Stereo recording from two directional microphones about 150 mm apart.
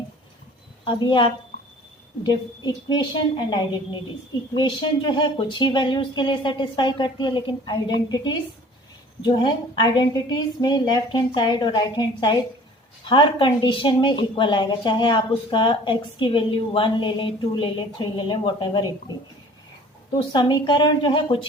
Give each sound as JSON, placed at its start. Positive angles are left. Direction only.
{"t": 0.9, "sound": "a woman's voice", "side_deg": 30}
{"t": 20.3, "sound": "a woman's voice", "side_deg": 30}